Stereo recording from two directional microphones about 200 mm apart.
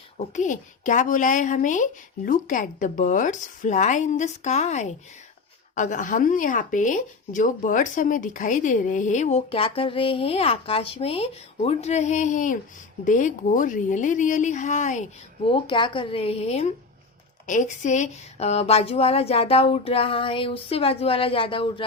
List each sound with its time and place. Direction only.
0.2 s speech: 40° left (ahead or behind)
15.4 s speech: 25° left (ahead or behind)